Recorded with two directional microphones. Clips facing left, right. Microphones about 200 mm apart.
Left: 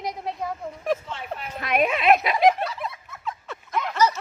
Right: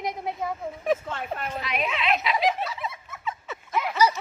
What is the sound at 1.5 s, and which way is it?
Speech, 50° left (ahead or behind).